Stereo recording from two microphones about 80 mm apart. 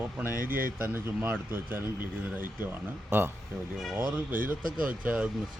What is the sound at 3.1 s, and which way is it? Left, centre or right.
Speech, right.